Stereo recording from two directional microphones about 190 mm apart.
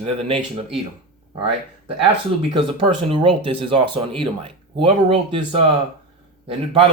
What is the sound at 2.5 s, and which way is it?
Speech, 25° right (ahead or behind).